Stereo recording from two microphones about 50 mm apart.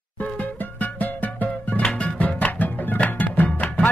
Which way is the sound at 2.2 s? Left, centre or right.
Left.